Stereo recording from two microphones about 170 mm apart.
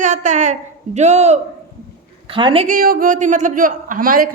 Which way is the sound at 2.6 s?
60° right (ahead or behind).